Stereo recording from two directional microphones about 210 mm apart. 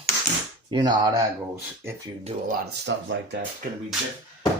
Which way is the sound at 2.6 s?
55° right (ahead or behind).